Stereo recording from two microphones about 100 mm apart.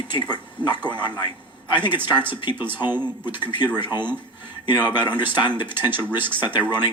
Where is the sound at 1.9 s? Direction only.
20° right (ahead or behind).